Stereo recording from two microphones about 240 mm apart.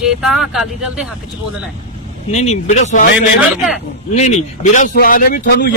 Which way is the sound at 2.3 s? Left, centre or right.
Left.